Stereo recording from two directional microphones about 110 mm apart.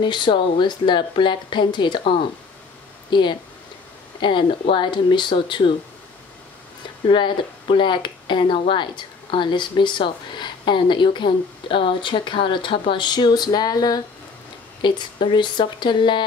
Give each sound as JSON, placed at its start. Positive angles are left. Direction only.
{"t": 0.0, "sound": "speech", "side_deg": 45}
{"t": 7.1, "sound": "speech", "side_deg": 50}